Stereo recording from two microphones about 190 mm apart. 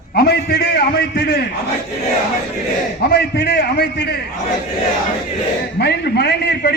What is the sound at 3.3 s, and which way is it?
Speech, 60° left (ahead or behind).